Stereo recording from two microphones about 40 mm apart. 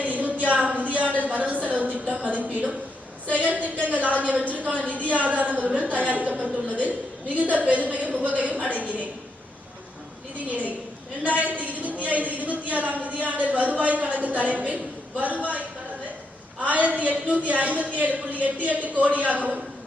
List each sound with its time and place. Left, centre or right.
0.0 s a sound: right
2.1 s a man's voice: right
10.5 s a woman's voice: right
16.6 s a man's voice: right